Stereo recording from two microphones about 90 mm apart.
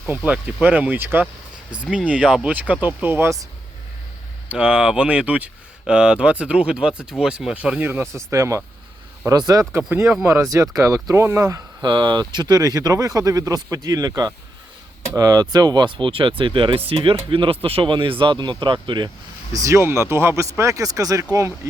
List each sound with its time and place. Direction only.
0.3 s speech: 15° right (ahead or behind)
1.7 s speech: 10° right (ahead or behind)
4.4 s speech: 15° right (ahead or behind)
8.1 s speech: 35° right (ahead or behind)
9.7 s speech: 25° right (ahead or behind)
11.8 s speech: 60° right (ahead or behind)
19.5 s speech: 35° right (ahead or behind)